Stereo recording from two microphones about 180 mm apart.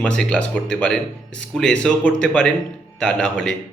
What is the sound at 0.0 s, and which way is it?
Speech, 5° left (ahead or behind).